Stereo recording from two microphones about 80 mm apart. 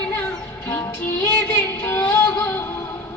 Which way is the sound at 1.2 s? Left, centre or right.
Left.